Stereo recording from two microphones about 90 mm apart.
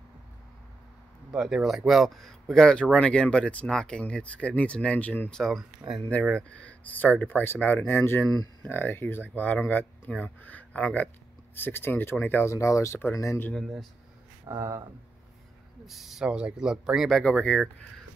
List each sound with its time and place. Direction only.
1.3 s speech: 5° right (ahead or behind); by 5.3 s 20° left (ahead or behind)
5.3 s speech: centre (ahead or behind)
6.2 s speech: 10° left (ahead or behind)
12.5 s speech: 35° left (ahead or behind)
13.5 s speech: 5° left (ahead or behind)
14.4 s speech: 40° right (ahead or behind)
15.9 s speech: 5° right (ahead or behind)
17.2 s speech: 10° left (ahead or behind)